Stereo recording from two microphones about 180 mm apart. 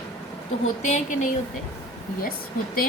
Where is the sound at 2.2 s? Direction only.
55° left (ahead or behind).